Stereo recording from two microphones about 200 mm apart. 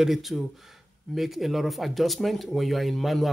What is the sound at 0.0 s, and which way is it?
Speech, centre (ahead or behind).